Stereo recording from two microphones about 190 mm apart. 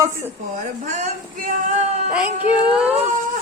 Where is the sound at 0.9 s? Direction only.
40° right (ahead or behind).